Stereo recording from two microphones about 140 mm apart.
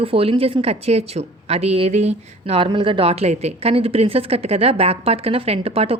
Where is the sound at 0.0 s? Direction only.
45° right (ahead or behind).